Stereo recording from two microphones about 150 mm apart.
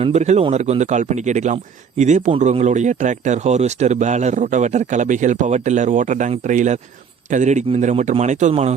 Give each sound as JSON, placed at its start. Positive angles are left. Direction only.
{"t": 0.0, "sound": "speech", "side_deg": -45}